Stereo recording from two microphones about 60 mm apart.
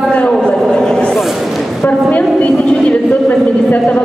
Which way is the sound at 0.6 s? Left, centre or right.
Centre.